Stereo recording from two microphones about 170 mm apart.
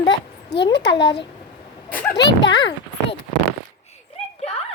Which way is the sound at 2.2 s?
90° left.